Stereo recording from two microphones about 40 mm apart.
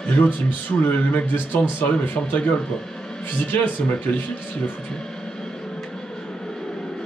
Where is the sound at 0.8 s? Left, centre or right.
Left.